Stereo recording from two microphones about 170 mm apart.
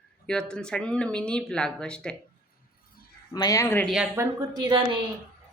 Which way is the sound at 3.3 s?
20° left (ahead or behind).